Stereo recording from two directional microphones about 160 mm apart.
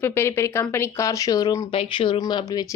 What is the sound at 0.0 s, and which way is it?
Speech, 15° left (ahead or behind).